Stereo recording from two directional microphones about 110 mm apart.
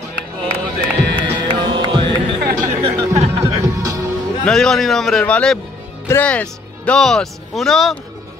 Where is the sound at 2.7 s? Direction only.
80° right.